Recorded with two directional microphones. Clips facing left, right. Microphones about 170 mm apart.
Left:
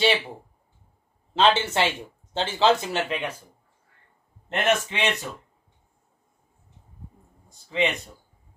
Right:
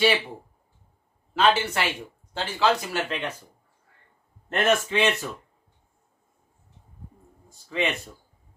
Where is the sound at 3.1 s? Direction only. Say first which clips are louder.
Left 1 dB; 10° left (ahead or behind).